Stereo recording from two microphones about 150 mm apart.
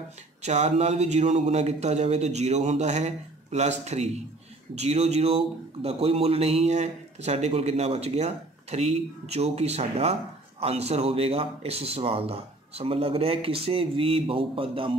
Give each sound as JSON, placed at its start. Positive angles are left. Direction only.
{"t": 0.4, "sound": "a man's voice", "side_deg": -50}